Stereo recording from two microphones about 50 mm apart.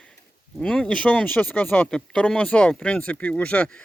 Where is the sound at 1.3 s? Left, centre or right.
Left.